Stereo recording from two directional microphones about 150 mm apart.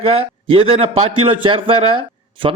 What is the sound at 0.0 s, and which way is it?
A man's voice, 40° right (ahead or behind).